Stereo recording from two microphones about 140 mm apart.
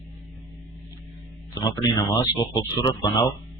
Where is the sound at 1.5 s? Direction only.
25° left (ahead or behind).